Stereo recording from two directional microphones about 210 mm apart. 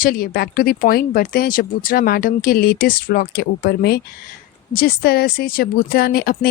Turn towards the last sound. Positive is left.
turn(degrees=45)  # may be behind; listen again after turning